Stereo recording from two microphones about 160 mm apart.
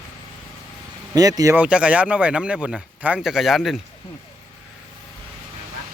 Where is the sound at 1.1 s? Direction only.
25° right (ahead or behind).